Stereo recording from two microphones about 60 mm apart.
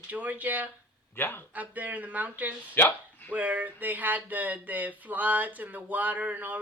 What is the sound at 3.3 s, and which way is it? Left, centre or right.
Speech, right.